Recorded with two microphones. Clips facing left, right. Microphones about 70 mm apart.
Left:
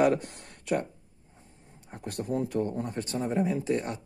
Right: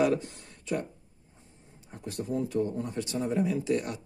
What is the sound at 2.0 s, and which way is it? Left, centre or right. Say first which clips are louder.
Speech: left 1 dB; left.